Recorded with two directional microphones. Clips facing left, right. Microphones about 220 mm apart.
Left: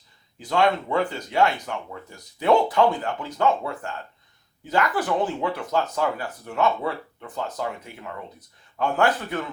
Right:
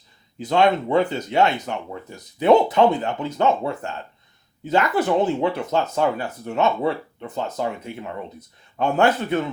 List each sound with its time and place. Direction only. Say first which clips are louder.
0.3 s speech: right 3 dB; 20° right (ahead or behind)